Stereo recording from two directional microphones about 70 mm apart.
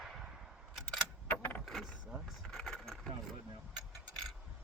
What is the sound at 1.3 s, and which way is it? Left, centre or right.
Coin, left.